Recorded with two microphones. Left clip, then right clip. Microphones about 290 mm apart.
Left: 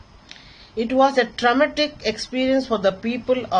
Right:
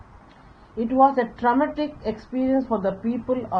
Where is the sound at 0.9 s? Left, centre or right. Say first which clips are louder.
Left 1 dB; left.